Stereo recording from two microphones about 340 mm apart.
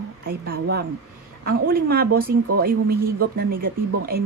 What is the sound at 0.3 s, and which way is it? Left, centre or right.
Speech, right.